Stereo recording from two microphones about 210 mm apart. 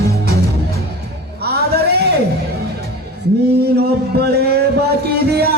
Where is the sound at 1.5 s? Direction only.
50° right (ahead or behind).